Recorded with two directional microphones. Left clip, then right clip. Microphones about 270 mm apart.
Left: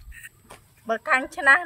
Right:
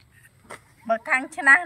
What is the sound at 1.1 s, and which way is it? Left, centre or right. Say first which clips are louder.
Music: even; centre.